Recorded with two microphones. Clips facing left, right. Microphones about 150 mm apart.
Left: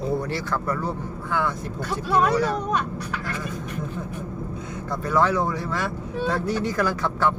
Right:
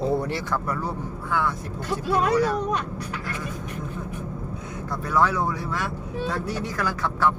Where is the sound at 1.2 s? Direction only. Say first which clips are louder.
Even; centre (ahead or behind).